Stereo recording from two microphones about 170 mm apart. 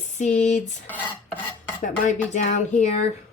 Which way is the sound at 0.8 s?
10° left (ahead or behind).